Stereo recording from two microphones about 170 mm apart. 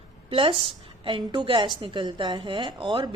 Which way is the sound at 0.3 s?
30° right (ahead or behind).